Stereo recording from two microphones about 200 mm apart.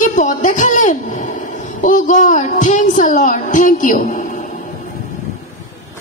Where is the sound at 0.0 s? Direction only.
40° left (ahead or behind).